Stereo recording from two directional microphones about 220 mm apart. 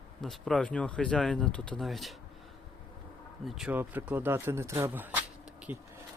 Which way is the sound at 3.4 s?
Centre (ahead or behind).